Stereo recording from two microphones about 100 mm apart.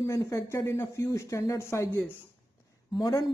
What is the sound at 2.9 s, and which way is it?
Speech, 40° left (ahead or behind).